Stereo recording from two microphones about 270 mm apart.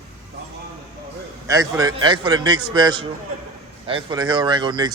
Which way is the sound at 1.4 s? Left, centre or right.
Centre.